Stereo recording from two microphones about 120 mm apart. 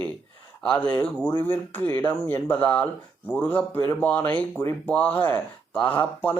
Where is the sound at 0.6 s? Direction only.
10° left (ahead or behind).